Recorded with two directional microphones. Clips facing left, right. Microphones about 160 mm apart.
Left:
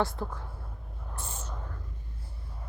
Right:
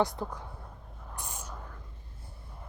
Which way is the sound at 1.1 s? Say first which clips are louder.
Left 1 dB; 15° right (ahead or behind).